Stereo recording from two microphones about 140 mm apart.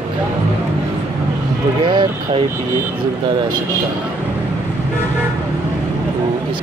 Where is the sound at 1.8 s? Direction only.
35° right (ahead or behind).